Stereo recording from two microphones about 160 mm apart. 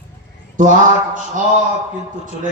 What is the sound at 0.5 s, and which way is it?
Speech, 55° right (ahead or behind).